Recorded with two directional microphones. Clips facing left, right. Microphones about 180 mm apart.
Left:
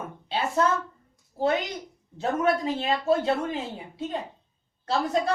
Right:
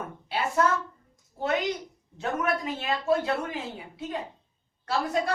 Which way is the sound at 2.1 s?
30° left (ahead or behind).